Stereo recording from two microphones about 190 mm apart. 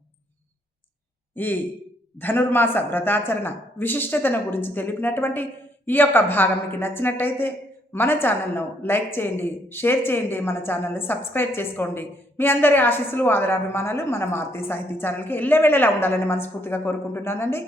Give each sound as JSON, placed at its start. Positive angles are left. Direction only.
{"t": 1.4, "sound": "a woman's voice", "side_deg": 10}